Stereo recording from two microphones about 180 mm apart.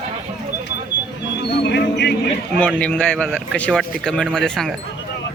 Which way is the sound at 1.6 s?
70° left (ahead or behind).